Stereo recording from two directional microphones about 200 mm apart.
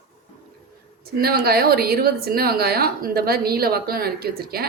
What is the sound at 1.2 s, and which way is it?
A woman's voice, 50° right (ahead or behind).